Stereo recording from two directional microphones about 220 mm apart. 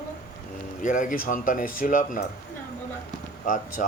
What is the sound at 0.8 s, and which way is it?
A man's voice, 35° left (ahead or behind).